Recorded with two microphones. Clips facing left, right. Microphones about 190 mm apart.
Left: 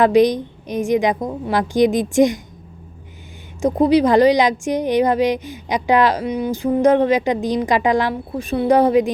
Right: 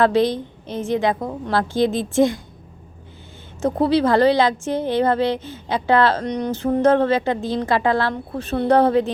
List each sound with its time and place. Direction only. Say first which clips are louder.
0.0 s a woman's voice: left 4 dB; 15° left (ahead or behind)
3.8 s a woman's voice: left 3 dB; 15° left (ahead or behind)